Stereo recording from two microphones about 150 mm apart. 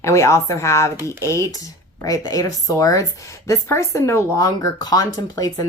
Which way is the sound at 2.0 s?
25° left (ahead or behind).